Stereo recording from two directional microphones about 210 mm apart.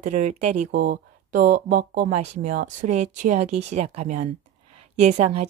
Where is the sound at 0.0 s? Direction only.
35° right (ahead or behind).